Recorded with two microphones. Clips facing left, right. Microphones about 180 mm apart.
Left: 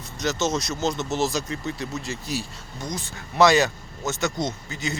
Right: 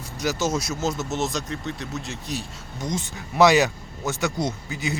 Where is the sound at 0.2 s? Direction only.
10° right (ahead or behind).